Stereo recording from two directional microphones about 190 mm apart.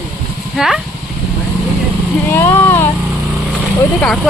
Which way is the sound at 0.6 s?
Centre (ahead or behind).